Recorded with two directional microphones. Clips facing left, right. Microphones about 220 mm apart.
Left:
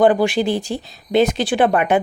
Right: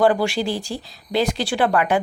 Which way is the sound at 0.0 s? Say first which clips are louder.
Left 4 dB; 20° left (ahead or behind).